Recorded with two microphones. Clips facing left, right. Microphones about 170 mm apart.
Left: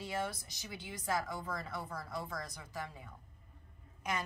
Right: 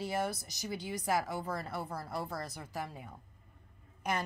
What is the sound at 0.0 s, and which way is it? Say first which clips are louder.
A woman's voice: right 4 dB; 40° right (ahead or behind).